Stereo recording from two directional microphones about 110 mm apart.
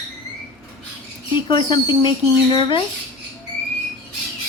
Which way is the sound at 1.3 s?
45° left (ahead or behind).